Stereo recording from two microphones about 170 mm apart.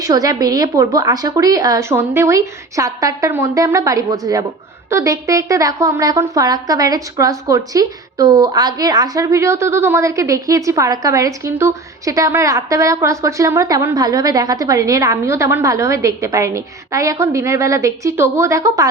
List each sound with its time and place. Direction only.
0.0 s a woman's voice: 20° right (ahead or behind)